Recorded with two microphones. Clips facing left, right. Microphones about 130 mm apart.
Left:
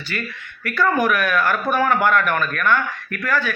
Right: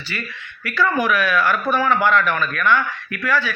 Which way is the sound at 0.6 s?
50° left (ahead or behind).